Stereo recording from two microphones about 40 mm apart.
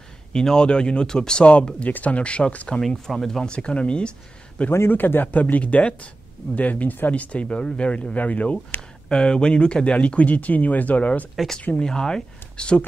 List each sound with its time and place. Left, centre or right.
0.3 s speech: centre
1.4 s speech: left
3.1 s speech: centre
3.4 s speech: left
4.6 s speech: left
9.1 s speech: left
11.7 s speech: centre